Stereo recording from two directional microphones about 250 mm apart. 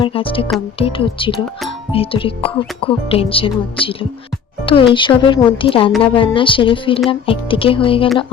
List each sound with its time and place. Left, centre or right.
0.0 s speech: left